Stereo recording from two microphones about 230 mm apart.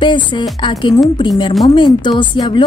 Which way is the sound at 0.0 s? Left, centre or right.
Left.